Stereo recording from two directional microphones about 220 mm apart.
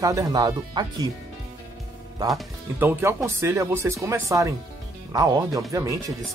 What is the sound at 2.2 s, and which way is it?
Speech, 15° right (ahead or behind).